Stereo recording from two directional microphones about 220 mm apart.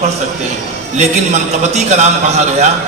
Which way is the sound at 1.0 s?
30° right (ahead or behind).